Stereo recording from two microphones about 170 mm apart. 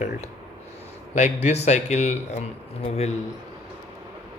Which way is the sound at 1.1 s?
40° left (ahead or behind).